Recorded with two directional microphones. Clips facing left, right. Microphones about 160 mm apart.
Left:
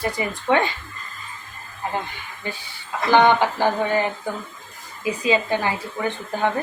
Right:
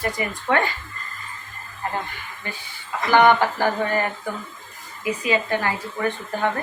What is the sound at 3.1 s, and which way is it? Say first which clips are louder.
Speech: even; 20° left (ahead or behind).